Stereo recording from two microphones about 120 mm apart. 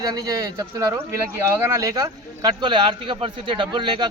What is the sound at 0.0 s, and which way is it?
Speech, 30° right (ahead or behind).